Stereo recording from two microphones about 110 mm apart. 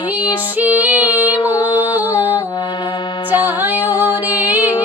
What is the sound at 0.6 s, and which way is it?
Female singing, 15° right (ahead or behind).